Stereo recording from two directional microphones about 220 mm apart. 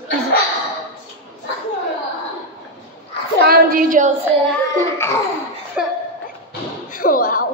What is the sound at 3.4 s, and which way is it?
Speech, 40° right (ahead or behind).